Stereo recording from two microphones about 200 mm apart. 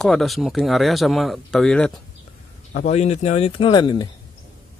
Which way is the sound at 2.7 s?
35° left (ahead or behind).